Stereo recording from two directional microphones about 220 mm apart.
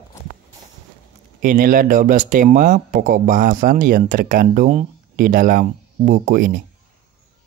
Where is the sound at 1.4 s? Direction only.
40° right (ahead or behind).